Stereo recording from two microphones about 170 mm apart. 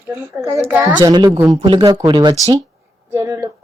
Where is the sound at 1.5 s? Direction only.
40° right (ahead or behind).